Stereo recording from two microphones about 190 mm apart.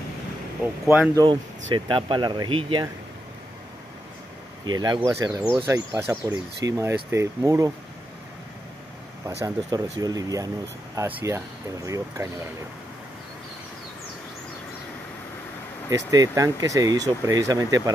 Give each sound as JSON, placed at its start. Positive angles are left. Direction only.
{"t": 0.8, "sound": "speech", "side_deg": -10}
{"t": 1.7, "sound": "speech", "side_deg": -25}
{"t": 4.6, "sound": "speech", "side_deg": -20}
{"t": 9.4, "sound": "speech", "side_deg": -15}
{"t": 15.9, "sound": "speech", "side_deg": -15}